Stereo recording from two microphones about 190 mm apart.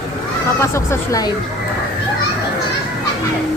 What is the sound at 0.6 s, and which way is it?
Speech, 15° left (ahead or behind).